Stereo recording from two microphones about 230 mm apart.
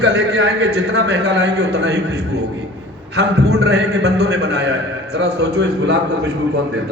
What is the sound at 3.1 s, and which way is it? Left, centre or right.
A man's voice, right.